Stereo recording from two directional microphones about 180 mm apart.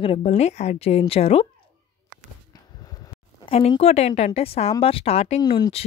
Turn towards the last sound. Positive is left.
turn(degrees=20)  # may be behind; listen again after turning